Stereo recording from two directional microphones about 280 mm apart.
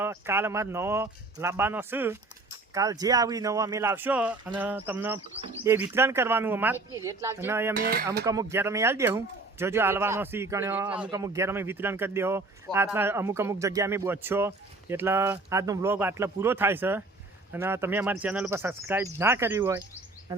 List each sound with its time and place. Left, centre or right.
0.0 s speech: centre
7.7 s speech: right
8.2 s speech: centre